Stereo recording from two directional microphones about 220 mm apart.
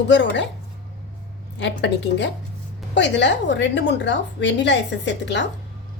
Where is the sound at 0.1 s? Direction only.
55° left (ahead or behind).